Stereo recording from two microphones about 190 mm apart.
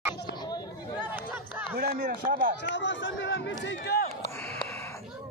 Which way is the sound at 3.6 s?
65° left (ahead or behind).